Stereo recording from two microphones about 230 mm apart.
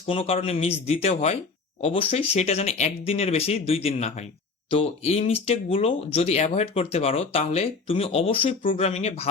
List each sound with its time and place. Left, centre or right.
0.1 s speech: left